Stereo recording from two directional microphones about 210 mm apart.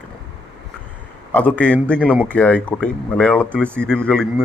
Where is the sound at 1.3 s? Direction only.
5° left (ahead or behind).